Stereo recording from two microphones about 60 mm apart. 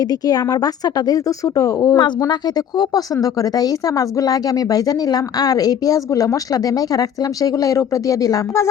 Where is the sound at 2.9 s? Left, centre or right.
Left.